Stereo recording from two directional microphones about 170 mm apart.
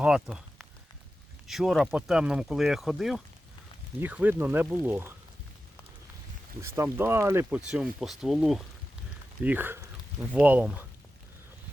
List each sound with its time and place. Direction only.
0.0 s speech: 5° right (ahead or behind)
6.6 s speech: 15° right (ahead or behind)